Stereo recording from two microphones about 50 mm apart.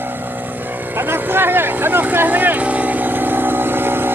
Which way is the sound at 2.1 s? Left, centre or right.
Right.